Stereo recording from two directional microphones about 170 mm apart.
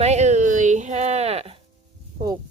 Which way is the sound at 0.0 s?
40° right (ahead or behind).